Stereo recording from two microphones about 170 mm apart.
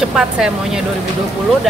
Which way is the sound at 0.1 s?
5° right (ahead or behind).